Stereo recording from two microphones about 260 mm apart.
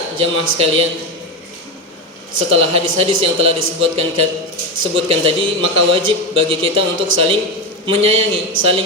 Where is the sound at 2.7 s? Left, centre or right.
Right.